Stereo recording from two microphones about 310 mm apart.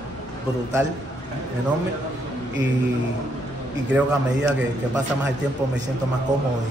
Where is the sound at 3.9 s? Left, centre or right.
Centre.